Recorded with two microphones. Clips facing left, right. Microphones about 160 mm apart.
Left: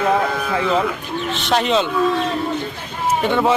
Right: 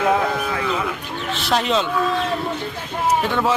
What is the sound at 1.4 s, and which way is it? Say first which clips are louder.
Speech: left 2 dB; centre (ahead or behind).